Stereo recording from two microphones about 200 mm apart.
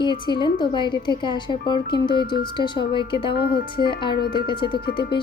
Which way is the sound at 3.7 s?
25° left (ahead or behind).